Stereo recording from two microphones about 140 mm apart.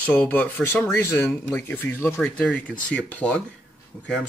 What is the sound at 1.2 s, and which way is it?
Speech, 5° left (ahead or behind).